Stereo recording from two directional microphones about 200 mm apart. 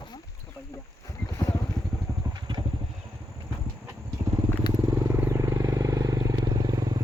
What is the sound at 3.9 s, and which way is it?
Vehicle, 15° right (ahead or behind).